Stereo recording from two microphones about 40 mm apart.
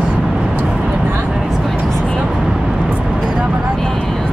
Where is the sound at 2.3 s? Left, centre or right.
Centre.